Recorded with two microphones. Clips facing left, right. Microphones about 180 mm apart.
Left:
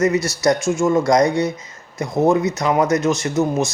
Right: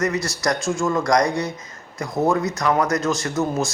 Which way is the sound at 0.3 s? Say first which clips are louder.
Left 5 dB; 20° left (ahead or behind).